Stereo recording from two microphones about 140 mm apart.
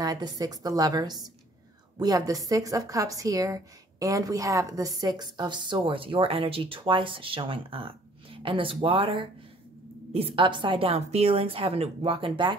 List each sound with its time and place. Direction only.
0.0 s a woman's voice: 25° right (ahead or behind)